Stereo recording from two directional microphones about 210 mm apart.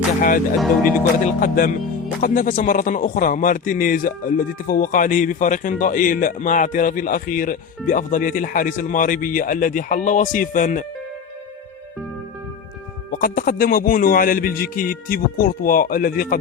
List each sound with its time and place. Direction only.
0.2 s speech: 40° left (ahead or behind)
13.1 s a man's voice: 40° left (ahead or behind)